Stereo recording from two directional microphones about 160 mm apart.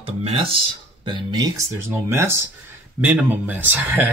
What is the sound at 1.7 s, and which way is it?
Speech, 15° right (ahead or behind).